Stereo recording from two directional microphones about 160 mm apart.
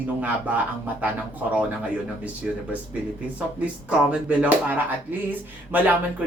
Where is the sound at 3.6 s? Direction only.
10° right (ahead or behind).